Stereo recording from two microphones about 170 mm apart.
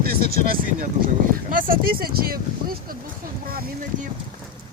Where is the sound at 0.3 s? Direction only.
60° right (ahead or behind).